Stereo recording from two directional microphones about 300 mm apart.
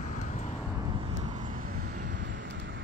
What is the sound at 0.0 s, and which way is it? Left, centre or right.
Vehicle, left.